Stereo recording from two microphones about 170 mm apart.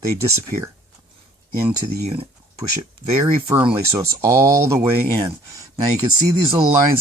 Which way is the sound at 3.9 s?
15° right (ahead or behind).